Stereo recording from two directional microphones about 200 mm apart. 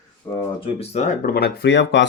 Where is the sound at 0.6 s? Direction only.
30° left (ahead or behind); by 2.1 s 60° left (ahead or behind).